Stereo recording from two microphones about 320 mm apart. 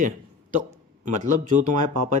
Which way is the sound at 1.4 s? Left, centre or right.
Right.